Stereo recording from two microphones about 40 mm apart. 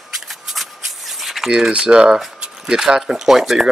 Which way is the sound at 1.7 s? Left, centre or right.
Right.